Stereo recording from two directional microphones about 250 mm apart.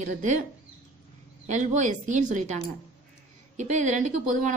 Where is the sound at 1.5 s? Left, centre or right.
Right.